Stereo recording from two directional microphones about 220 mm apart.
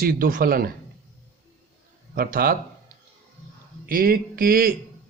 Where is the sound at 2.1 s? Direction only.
40° right (ahead or behind).